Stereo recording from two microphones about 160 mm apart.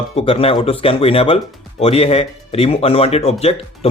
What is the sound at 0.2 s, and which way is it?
Speech, 35° left (ahead or behind).